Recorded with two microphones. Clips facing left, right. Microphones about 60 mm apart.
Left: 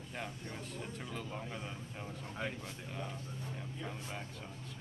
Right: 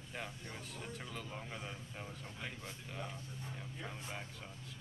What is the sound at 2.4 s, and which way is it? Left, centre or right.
Speech, left.